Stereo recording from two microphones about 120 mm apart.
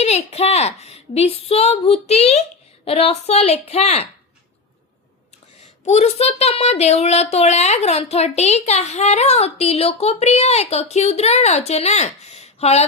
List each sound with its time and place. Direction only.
0.0 s speech: 60° left (ahead or behind)
5.8 s speech: 65° left (ahead or behind)